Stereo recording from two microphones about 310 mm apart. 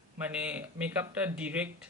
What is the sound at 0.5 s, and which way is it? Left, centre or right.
Speech, centre.